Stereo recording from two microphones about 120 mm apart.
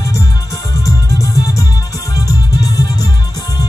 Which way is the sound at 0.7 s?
30° left (ahead or behind).